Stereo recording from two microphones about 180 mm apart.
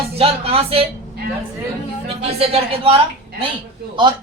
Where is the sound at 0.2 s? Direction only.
30° right (ahead or behind).